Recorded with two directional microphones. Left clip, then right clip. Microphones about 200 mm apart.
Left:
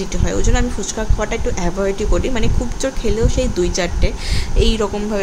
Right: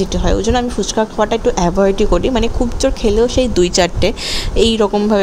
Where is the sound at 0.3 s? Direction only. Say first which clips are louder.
Right 5 dB; 20° right (ahead or behind).